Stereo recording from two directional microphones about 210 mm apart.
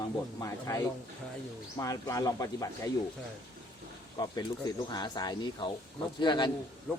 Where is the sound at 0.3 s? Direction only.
15° left (ahead or behind).